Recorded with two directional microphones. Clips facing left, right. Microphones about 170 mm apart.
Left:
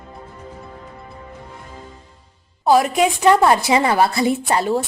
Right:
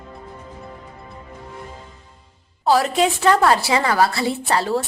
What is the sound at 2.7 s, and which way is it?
A woman's voice, 15° left (ahead or behind).